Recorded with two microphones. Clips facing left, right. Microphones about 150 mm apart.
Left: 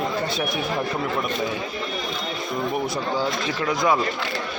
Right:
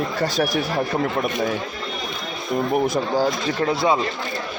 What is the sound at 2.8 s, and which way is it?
A man's voice, 45° right (ahead or behind).